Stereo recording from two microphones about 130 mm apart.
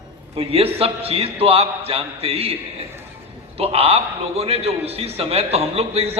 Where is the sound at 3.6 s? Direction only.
50° right (ahead or behind).